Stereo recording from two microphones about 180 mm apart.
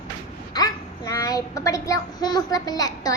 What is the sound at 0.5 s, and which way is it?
A child's voice, 20° left (ahead or behind).